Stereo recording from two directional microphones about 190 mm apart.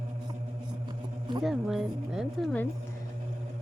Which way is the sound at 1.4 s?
Centre (ahead or behind).